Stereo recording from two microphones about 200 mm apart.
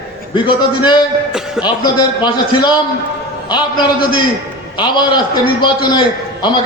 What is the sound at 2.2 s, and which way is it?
A man's voice, 20° left (ahead or behind).